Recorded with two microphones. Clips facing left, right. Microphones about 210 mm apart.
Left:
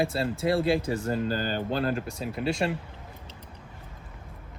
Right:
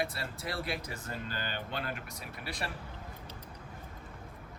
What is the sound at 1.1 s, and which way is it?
Speech, 40° left (ahead or behind).